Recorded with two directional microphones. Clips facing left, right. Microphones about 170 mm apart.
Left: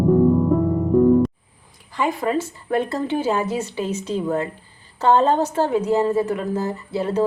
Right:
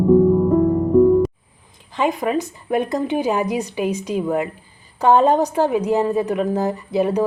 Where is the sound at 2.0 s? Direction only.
20° right (ahead or behind).